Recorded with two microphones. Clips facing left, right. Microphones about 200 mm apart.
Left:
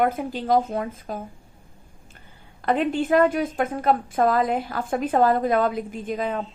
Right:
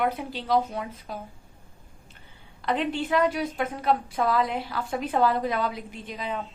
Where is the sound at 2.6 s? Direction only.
45° left (ahead or behind).